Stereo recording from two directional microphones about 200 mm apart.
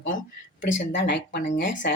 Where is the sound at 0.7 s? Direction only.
60° left (ahead or behind).